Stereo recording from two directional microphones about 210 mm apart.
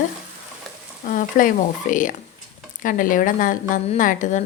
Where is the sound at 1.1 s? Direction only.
40° left (ahead or behind).